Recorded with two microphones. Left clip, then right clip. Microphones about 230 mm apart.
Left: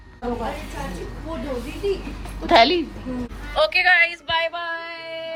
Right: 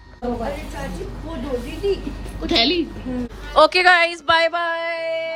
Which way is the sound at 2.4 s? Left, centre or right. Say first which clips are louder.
Left 3 dB; centre.